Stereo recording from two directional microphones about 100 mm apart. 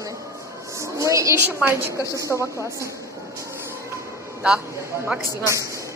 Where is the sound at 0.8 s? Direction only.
30° right (ahead or behind).